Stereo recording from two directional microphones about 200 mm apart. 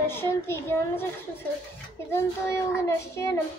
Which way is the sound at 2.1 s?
15° left (ahead or behind).